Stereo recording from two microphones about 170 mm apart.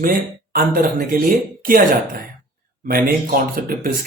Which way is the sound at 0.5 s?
55° right (ahead or behind).